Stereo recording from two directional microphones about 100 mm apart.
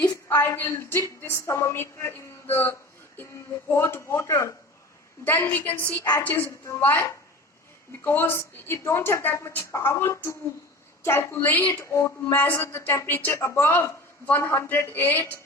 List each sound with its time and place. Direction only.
0.3 s a woman's voice: 20° left (ahead or behind)
5.2 s a woman's voice: 20° left (ahead or behind)
11.7 s speech: 30° left (ahead or behind)